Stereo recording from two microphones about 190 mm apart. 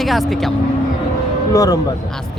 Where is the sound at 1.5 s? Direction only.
20° left (ahead or behind).